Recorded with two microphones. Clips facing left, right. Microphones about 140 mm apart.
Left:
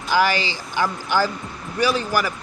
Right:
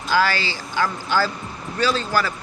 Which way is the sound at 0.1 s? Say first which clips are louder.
Left 1 dB; 15° left (ahead or behind).